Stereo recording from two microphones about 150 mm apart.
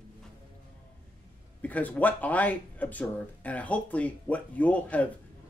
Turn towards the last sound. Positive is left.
turn(degrees=10)  # may be behind; listen again after turning